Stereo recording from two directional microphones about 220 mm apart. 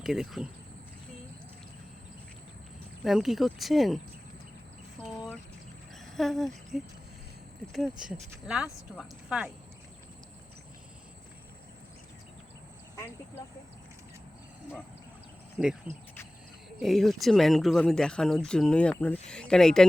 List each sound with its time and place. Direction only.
0.0 s speech: centre (ahead or behind)
3.0 s speech: centre (ahead or behind)
6.1 s speech: centre (ahead or behind)
15.6 s speech: centre (ahead or behind)